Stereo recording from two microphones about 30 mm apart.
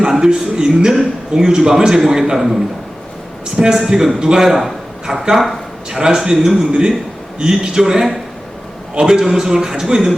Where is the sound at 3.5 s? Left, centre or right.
Right.